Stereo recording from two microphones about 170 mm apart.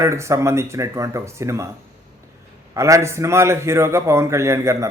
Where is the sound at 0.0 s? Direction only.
15° right (ahead or behind).